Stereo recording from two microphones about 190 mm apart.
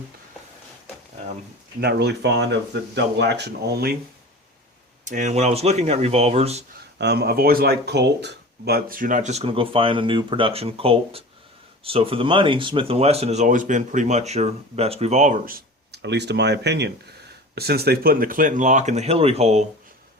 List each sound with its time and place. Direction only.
1.8 s speech: 60° right (ahead or behind)
5.0 s speech: 40° right (ahead or behind)
7.0 s speech: 60° right (ahead or behind); by 19.6 s 35° right (ahead or behind)